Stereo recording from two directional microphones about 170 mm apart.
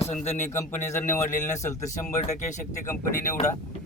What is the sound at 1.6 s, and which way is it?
Speech, 15° left (ahead or behind).